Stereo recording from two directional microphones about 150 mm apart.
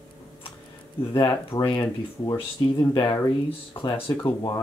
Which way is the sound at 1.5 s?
15° left (ahead or behind).